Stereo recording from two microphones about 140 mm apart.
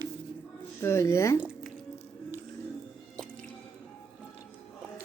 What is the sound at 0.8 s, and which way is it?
Speech, 20° left (ahead or behind).